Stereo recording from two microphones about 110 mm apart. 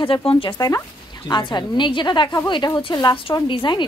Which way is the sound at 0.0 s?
55° left (ahead or behind).